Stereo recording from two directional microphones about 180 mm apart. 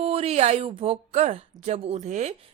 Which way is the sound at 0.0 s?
35° right (ahead or behind).